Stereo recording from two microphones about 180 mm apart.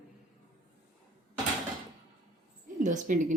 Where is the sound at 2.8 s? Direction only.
45° right (ahead or behind).